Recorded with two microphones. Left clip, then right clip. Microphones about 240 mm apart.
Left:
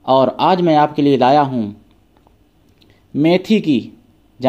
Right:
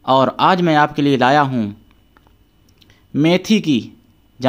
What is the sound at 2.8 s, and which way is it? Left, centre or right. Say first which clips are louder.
Speech: even; right.